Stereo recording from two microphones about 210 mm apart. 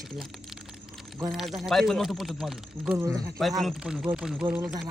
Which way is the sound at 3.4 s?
Centre (ahead or behind).